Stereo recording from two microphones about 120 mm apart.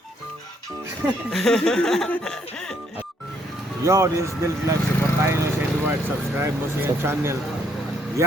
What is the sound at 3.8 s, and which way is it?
Speech, 25° right (ahead or behind).